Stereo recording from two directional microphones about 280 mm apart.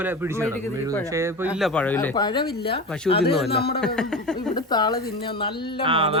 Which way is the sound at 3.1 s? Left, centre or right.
Centre.